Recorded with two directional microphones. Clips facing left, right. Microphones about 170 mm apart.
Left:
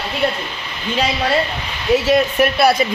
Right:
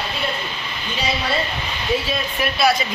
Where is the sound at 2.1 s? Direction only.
65° left (ahead or behind).